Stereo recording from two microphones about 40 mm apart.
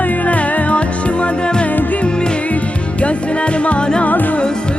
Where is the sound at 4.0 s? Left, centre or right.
Left.